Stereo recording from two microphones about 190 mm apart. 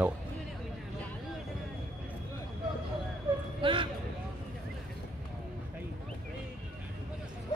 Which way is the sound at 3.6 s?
25° right (ahead or behind).